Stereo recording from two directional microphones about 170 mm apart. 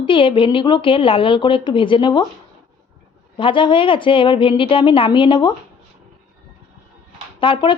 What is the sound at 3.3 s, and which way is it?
Speech, 30° left (ahead or behind).